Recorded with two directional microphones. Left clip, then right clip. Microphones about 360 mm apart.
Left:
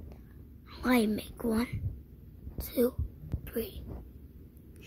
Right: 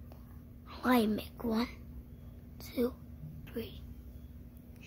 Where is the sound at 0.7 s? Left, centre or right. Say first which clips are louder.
Left 1 dB; centre.